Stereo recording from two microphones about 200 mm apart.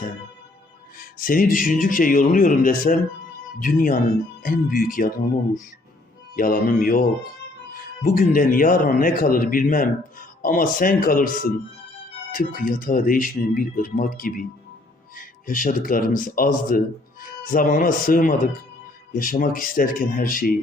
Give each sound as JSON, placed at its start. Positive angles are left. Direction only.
{"t": 0.9, "sound": "speech", "side_deg": 45}
{"t": 6.3, "sound": "speech", "side_deg": 45}